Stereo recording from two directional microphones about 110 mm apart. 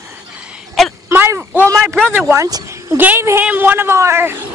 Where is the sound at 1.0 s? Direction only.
20° right (ahead or behind).